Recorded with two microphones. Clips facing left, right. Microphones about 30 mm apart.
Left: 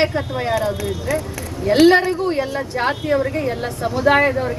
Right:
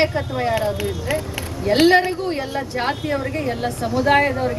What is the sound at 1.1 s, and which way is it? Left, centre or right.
Speech, right.